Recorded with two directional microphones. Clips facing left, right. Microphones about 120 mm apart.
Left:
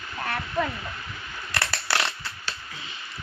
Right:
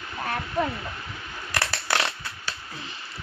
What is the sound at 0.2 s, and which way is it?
Waterfall, 20° right (ahead or behind).